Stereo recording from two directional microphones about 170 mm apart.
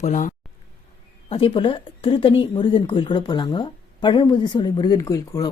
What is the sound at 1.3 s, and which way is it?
Speech, 30° left (ahead or behind).